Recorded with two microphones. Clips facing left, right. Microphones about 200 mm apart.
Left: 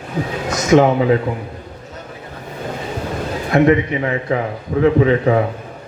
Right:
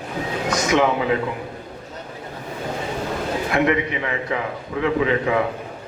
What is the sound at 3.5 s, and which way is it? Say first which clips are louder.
A man's voice: left 8 dB; 35° left (ahead or behind).